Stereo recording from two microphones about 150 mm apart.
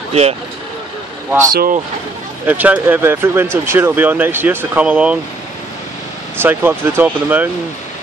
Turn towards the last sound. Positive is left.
turn(degrees=-10)  # may be behind; listen again after turning